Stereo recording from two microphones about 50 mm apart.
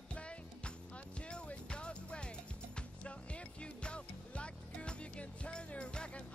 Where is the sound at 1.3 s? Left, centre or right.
Centre.